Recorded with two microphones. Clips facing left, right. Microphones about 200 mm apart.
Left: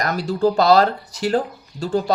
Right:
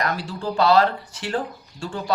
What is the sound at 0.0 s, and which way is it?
Speech, 40° left (ahead or behind).